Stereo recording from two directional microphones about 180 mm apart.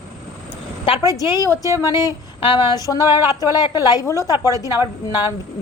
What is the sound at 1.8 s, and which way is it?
A woman's voice, 20° left (ahead or behind).